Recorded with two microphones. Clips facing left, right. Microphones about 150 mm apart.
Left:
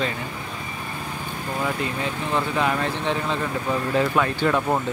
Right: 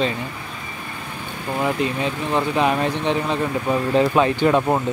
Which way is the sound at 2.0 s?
20° right (ahead or behind).